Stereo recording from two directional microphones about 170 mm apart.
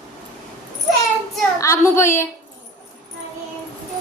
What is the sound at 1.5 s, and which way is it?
Speech, 15° left (ahead or behind).